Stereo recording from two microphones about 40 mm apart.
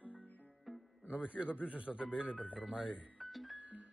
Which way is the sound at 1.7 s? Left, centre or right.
Right.